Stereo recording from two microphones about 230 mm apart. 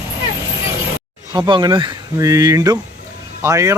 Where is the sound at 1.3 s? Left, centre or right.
Centre.